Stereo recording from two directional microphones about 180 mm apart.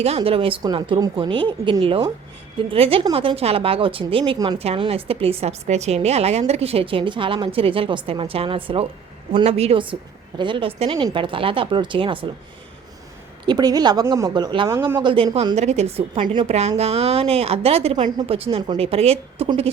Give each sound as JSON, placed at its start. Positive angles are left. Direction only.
{"t": 0.0, "sound": "a woman's voice", "side_deg": -35}
{"t": 13.4, "sound": "a woman's voice", "side_deg": -25}
{"t": 14.7, "sound": "a man's voice", "side_deg": -15}
{"t": 15.0, "sound": "a woman's voice", "side_deg": -30}